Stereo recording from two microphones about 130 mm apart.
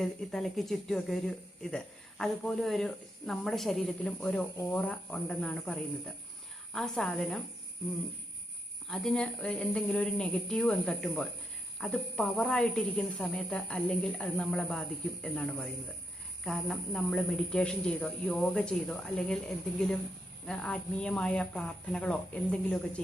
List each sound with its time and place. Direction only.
0.0 s a woman's voice: 5° left (ahead or behind)
8.9 s a woman's voice: 5° left (ahead or behind)
20.5 s speech: 5° left (ahead or behind)